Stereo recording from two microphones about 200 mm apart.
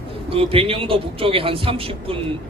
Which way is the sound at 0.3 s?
30° right (ahead or behind).